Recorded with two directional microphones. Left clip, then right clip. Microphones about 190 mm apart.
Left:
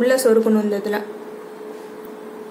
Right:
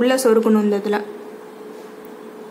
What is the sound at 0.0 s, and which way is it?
A woman's voice, 25° right (ahead or behind).